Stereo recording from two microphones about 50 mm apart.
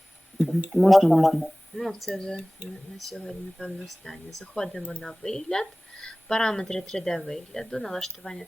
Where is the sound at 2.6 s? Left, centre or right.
Right.